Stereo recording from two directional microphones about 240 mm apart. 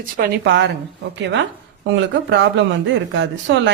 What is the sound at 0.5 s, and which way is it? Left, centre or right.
A woman's voice, right.